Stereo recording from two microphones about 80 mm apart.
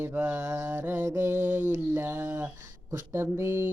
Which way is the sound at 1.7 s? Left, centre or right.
Right.